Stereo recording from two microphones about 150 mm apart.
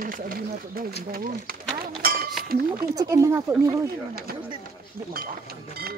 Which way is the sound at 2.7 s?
20° right (ahead or behind).